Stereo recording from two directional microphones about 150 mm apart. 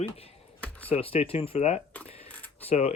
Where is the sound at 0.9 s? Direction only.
40° left (ahead or behind).